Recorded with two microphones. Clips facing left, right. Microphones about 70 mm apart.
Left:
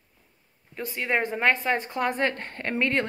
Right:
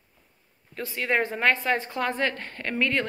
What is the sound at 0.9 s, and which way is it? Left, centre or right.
A woman's voice, centre.